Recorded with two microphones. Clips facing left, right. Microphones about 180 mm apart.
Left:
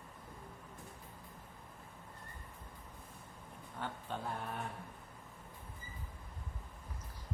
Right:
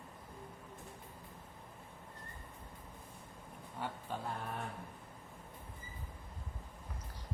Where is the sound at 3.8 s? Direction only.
10° right (ahead or behind).